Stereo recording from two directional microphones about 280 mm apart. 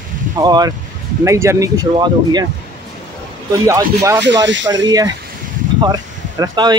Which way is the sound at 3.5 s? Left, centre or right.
Centre.